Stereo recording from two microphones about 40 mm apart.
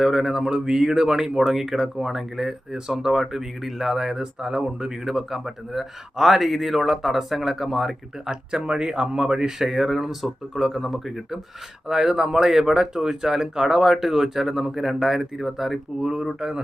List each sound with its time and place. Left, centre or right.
0.0 s speech: centre
5.0 s speech: centre
8.5 s speech: right; by 11.3 s centre
11.9 s speech: centre
16.0 s speech: centre